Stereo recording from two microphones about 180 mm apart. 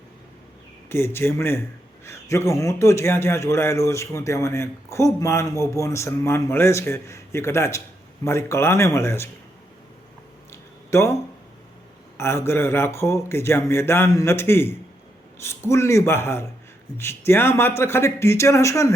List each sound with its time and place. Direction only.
0.9 s a man's voice: 15° left (ahead or behind)
10.5 s a sound: 15° left (ahead or behind)
12.1 s a man's voice: 15° left (ahead or behind)